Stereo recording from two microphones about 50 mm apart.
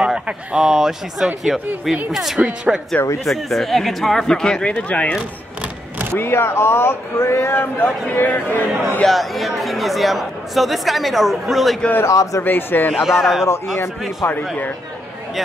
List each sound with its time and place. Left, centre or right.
0.0 s speech: right
0.7 s speech: centre
2.3 s speech: centre
3.3 s speech: centre; by 5.2 s left
6.1 s speech: left
8.1 s speech: left
9.0 s speech: centre
12.0 s a man's voice: left
12.4 s speech: left
12.9 s speech: centre
14.2 s speech: left